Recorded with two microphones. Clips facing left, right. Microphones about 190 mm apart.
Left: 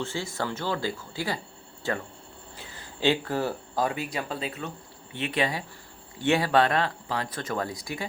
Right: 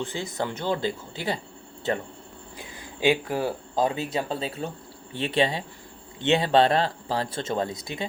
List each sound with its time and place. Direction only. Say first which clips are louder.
0.0 s speech: right 1 dB; 20° right (ahead or behind)
3.8 s speech: right 3 dB; 25° right (ahead or behind)